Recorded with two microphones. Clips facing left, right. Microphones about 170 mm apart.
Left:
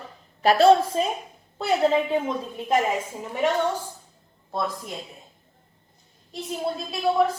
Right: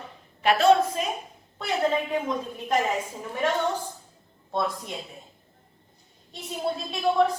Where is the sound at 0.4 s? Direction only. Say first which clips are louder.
Left 3 dB; 35° left (ahead or behind).